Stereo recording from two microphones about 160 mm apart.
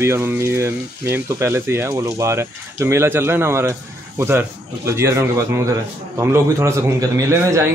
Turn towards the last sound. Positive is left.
turn(degrees=-20)  # may be behind; listen again after turning